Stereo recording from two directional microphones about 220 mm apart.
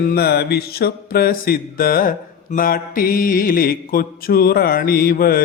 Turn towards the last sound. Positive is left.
turn(degrees=40)  # may be behind; listen again after turning